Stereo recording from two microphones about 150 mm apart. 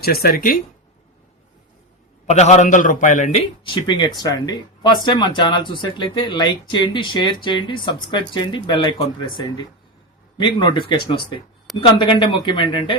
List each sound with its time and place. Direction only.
0.0 s speech: 90° left; by 0.6 s 70° left (ahead or behind)
2.2 s a man's voice: 45° left (ahead or behind)
3.6 s speech: 30° left (ahead or behind)
10.3 s speech: 30° left (ahead or behind)